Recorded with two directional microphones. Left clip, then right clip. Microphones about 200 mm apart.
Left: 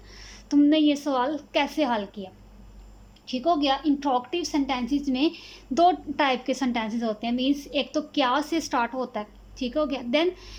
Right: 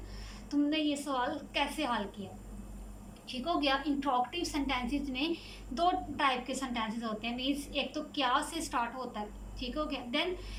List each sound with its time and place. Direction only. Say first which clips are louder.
0.5 s a woman's voice: left 11 dB; 40° left (ahead or behind)
3.3 s a woman's voice: left 8 dB; 40° left (ahead or behind)